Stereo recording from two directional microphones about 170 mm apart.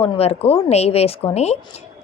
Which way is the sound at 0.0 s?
35° left (ahead or behind).